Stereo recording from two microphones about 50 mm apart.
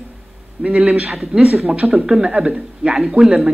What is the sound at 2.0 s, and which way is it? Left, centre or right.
Speech, centre.